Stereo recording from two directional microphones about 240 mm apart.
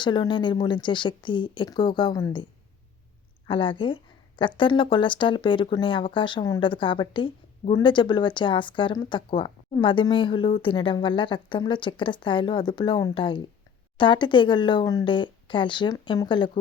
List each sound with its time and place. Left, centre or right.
0.0 s a woman's voice: centre